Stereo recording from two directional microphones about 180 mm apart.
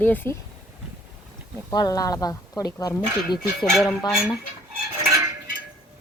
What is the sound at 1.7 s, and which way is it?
Speech, 20° left (ahead or behind).